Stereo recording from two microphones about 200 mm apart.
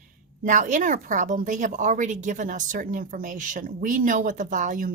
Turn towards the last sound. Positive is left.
turn(degrees=-40)  # may be behind; listen again after turning